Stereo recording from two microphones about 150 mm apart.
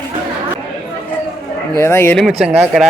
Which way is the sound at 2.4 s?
5° right (ahead or behind).